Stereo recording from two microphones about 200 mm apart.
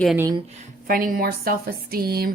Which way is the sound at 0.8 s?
45° right (ahead or behind).